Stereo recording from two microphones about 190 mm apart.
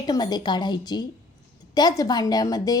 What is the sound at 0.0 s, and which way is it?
A woman's voice, 20° left (ahead or behind).